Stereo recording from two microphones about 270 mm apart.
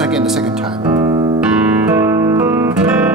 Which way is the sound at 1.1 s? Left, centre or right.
Centre.